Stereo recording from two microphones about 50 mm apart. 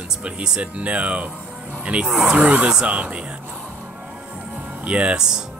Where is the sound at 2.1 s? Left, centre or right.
Centre.